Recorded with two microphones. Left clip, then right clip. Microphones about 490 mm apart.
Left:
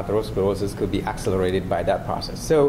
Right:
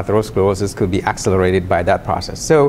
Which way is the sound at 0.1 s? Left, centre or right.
Right.